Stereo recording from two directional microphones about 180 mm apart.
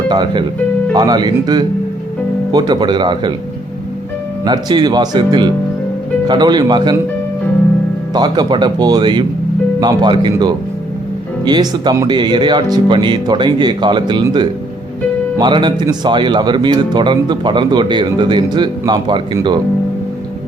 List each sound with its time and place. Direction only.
0.1 s a man's voice: 25° right (ahead or behind)
4.4 s a man's voice: 25° right (ahead or behind)
8.1 s a man's voice: 25° right (ahead or behind)